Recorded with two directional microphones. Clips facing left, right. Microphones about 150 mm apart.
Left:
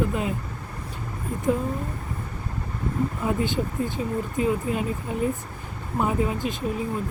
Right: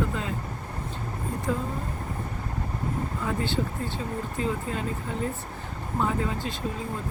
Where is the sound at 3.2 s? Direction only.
15° left (ahead or behind).